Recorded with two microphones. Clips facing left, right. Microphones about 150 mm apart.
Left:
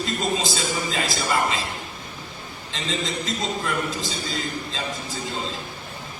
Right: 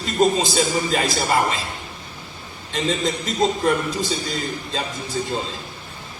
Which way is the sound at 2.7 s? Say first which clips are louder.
Right 6 dB; 45° right (ahead or behind).